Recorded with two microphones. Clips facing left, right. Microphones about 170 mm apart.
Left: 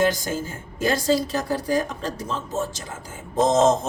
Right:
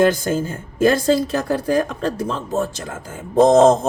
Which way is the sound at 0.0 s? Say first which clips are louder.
Right 6 dB; 55° right (ahead or behind).